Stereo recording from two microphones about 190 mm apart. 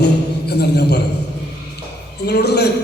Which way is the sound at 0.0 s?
60° left (ahead or behind).